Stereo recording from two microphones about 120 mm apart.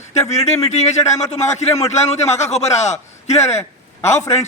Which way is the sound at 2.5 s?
70° left (ahead or behind).